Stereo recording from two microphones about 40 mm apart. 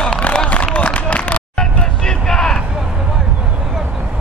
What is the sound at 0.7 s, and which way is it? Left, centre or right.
Run, left.